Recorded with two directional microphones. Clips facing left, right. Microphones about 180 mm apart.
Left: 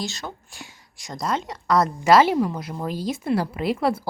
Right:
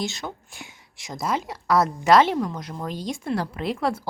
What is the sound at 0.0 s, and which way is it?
Speech, 20° right (ahead or behind).